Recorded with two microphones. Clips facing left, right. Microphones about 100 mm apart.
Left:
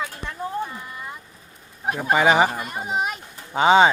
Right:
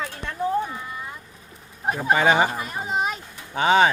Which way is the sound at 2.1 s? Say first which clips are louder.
Left 2 dB; 15° left (ahead or behind).